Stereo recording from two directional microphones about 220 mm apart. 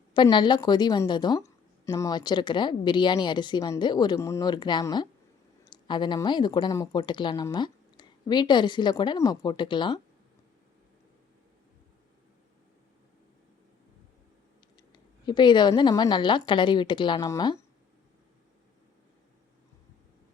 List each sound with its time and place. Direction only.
0.1 s a woman's voice: 20° left (ahead or behind)
14.9 s a woman's voice: 20° left (ahead or behind)